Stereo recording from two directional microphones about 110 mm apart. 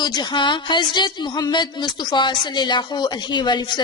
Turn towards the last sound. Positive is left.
turn(degrees=45)  # may be behind; listen again after turning